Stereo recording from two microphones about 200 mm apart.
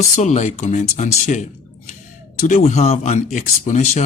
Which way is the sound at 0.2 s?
35° left (ahead or behind).